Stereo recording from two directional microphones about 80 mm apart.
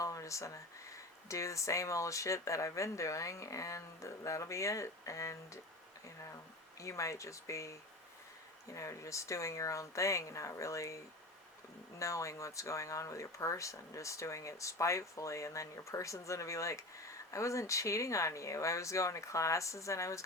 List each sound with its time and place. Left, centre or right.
0.0 s a sound: left
1.3 s speech: left
6.7 s speech: left